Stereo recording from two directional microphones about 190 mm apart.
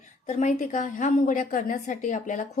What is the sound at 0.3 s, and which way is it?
A woman's voice, 40° left (ahead or behind).